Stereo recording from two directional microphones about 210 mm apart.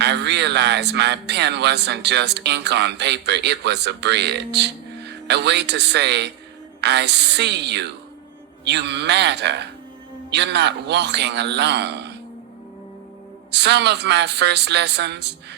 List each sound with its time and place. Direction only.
0.0 s speech: 55° right (ahead or behind)
13.5 s speech: 55° right (ahead or behind)